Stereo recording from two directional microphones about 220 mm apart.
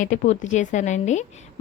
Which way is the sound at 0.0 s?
35° left (ahead or behind).